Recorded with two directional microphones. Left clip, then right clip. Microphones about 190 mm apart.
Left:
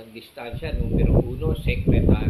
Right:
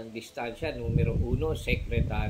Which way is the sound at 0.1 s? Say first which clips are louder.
Even; 30° right (ahead or behind).